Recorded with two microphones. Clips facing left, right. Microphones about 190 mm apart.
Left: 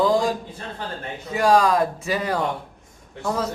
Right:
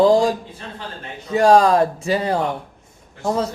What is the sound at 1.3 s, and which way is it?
Speech, 35° right (ahead or behind).